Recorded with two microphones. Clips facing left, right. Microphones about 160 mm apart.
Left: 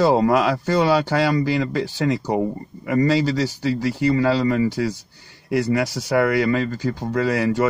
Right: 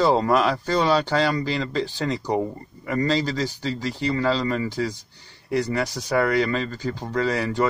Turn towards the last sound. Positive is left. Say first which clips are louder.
# left 3 dB
turn(degrees=10)  # may be behind; listen again after turning